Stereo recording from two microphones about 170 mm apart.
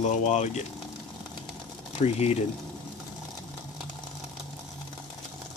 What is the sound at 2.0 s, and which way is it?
Speech, 40° left (ahead or behind).